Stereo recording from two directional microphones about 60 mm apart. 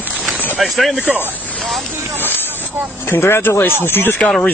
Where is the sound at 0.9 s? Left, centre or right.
Right.